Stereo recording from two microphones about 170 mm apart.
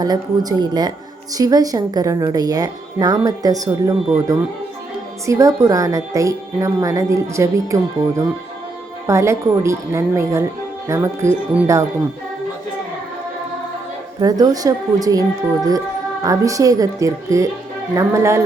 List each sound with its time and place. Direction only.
0.0 s a woman's voice: 25° right (ahead or behind)
14.2 s speech: 20° right (ahead or behind)
16.2 s a woman's voice: 20° right (ahead or behind)